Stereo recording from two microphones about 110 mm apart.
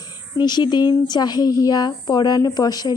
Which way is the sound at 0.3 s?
40° left (ahead or behind).